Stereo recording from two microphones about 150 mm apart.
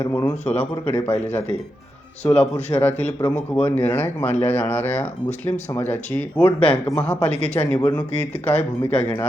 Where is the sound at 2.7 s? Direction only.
10° left (ahead or behind).